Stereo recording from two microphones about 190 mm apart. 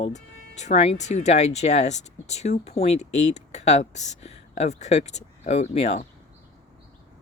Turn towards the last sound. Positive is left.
turn(degrees=35)  # may be behind; listen again after turning